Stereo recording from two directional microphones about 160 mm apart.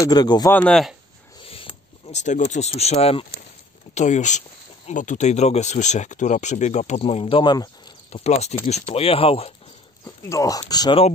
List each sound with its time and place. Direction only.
0.0 s speech: 25° left (ahead or behind)
0.5 s speech: 5° left (ahead or behind)
1.4 s speech: 35° left (ahead or behind)
10.2 s speech: 20° left (ahead or behind)